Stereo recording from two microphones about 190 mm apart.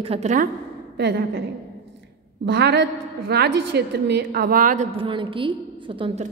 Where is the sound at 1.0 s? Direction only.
60° right (ahead or behind).